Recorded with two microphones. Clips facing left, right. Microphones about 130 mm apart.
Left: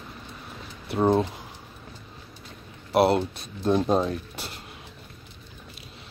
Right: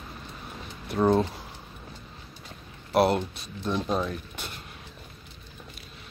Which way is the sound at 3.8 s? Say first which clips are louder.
Left 5 dB; 35° left (ahead or behind).